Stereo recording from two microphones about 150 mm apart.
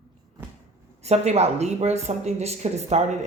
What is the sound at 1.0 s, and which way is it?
Speech, 45° right (ahead or behind).